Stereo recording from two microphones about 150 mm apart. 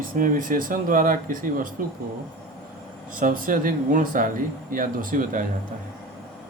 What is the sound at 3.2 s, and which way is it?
Speech, 65° right (ahead or behind).